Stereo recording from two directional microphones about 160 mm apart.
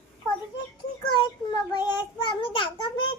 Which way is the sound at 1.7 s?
25° left (ahead or behind).